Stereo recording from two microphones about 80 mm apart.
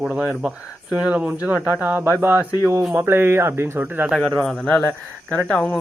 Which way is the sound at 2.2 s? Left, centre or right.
Right.